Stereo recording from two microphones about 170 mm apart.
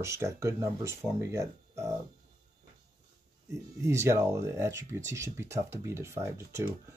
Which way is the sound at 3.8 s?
15° right (ahead or behind).